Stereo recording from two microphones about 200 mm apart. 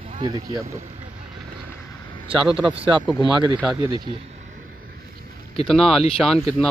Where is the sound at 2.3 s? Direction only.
25° right (ahead or behind).